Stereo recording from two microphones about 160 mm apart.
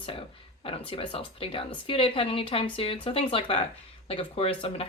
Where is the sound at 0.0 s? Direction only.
35° left (ahead or behind).